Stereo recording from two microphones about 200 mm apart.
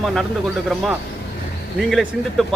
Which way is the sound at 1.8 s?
Centre (ahead or behind).